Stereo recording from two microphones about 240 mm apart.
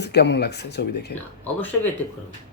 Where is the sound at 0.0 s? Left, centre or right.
Left.